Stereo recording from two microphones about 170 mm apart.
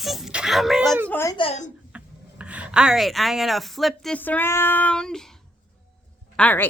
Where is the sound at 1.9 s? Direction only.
5° right (ahead or behind).